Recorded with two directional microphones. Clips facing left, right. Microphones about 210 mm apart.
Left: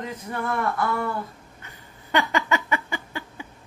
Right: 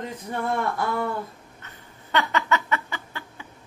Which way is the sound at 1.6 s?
10° left (ahead or behind).